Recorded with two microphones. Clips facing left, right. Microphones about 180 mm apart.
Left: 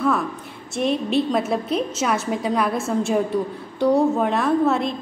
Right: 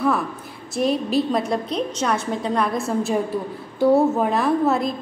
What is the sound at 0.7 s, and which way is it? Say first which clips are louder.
A woman's voice: even; centre (ahead or behind).